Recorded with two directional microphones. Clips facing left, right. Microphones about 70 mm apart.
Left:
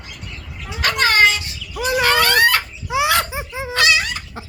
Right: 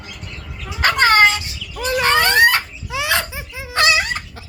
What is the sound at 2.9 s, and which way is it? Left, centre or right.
Laughter, left.